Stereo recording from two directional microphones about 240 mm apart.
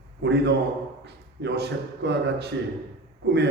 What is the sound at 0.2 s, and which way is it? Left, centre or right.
A man's voice, right.